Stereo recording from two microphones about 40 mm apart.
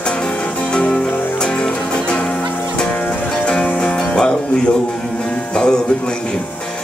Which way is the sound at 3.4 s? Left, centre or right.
Left.